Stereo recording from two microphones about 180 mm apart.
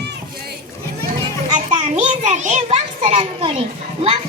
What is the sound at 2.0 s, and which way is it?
Children playing, 40° right (ahead or behind).